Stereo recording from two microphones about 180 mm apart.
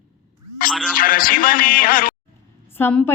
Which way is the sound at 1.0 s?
50° left (ahead or behind).